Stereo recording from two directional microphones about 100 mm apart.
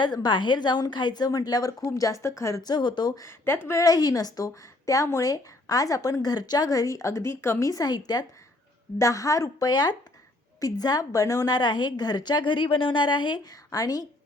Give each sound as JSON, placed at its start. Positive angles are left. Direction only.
{"t": 0.0, "sound": "a woman's voice", "side_deg": 50}
{"t": 2.6, "sound": "a woman's voice", "side_deg": 50}
{"t": 3.2, "sound": "a woman's voice", "side_deg": 25}